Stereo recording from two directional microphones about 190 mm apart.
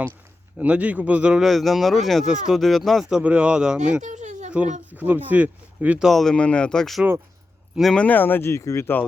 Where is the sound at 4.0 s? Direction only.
40° right (ahead or behind).